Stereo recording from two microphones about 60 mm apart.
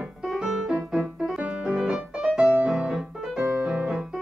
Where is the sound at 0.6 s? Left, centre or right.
Centre.